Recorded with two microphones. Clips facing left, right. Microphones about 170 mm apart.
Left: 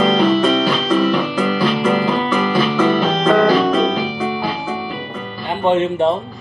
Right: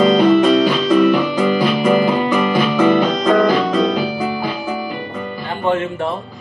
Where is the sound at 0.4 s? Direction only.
15° right (ahead or behind).